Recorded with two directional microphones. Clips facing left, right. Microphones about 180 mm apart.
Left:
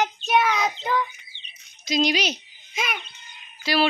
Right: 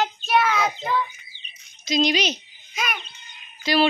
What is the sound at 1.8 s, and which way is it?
Speech, 10° left (ahead or behind).